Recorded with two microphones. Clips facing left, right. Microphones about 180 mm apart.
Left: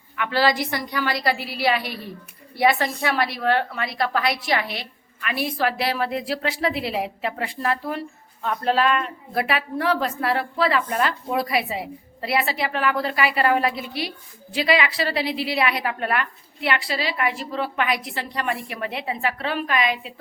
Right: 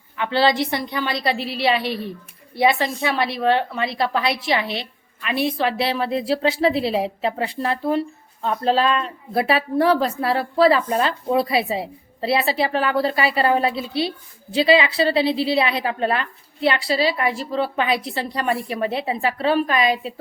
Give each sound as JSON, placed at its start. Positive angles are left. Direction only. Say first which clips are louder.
{"t": 0.2, "sound": "a woman's voice", "louder": "right 3 dB", "side_deg": -25}